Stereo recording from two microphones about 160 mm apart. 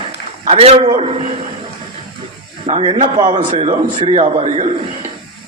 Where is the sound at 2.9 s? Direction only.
50° right (ahead or behind).